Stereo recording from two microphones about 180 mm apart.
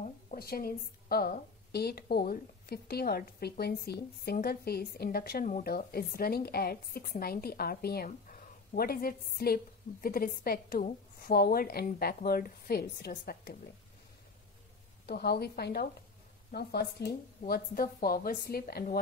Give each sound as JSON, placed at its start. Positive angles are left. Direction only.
{"t": 0.4, "sound": "a woman's voice", "side_deg": 55}
{"t": 15.0, "sound": "a woman's voice", "side_deg": 60}